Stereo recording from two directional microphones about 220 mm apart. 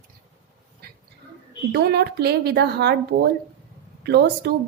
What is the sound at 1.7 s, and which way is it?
Speech, 45° right (ahead or behind).